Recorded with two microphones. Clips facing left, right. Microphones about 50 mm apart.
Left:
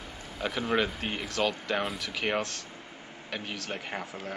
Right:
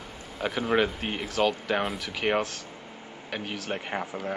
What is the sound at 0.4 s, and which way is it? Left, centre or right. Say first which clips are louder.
Speech: right 3 dB; centre.